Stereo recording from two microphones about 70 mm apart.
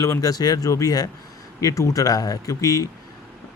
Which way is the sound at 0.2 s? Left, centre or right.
Left.